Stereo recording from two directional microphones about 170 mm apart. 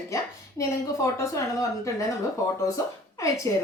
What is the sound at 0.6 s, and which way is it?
Speech, 20° left (ahead or behind).